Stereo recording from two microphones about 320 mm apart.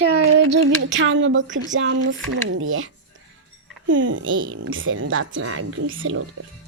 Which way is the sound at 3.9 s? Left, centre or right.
Right.